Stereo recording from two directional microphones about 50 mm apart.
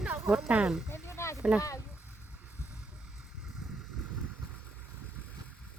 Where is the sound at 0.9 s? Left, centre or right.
Left.